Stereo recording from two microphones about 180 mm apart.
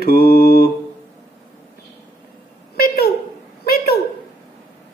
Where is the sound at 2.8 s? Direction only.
60° left (ahead or behind).